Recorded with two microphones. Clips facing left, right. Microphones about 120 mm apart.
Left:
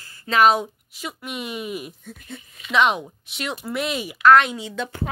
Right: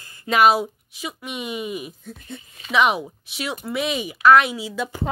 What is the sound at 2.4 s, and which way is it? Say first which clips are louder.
Speech: right 1 dB; 25° right (ahead or behind).